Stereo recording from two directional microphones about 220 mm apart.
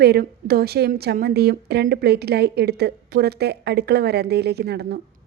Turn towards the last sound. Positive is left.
turn(degrees=-45)  # may be behind; listen again after turning